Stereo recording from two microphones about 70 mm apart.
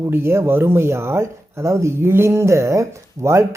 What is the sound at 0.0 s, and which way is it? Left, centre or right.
A man's voice, right.